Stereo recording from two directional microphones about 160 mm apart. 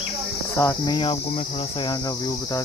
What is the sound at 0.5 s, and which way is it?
Speech, 20° left (ahead or behind).